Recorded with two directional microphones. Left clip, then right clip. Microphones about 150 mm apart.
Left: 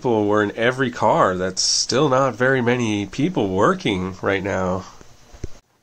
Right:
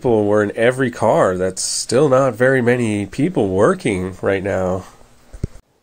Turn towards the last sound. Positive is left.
turn(degrees=-20)  # may be behind; listen again after turning